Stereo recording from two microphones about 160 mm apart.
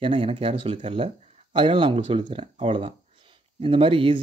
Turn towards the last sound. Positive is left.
turn(degrees=-35)  # may be behind; listen again after turning